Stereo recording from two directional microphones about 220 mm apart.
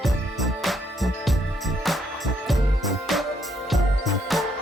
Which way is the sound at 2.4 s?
Centre (ahead or behind).